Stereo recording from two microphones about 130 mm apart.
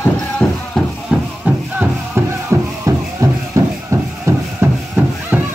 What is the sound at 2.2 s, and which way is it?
Music, 20° right (ahead or behind).